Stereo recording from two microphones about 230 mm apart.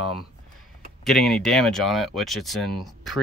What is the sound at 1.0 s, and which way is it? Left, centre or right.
Speech, centre.